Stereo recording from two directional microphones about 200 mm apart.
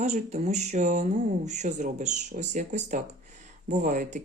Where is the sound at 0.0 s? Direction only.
35° right (ahead or behind).